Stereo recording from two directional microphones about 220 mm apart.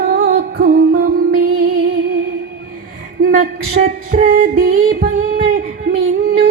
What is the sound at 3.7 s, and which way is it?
Music, 40° right (ahead or behind).